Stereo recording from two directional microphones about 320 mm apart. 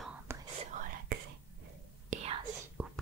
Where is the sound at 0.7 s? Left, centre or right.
Right.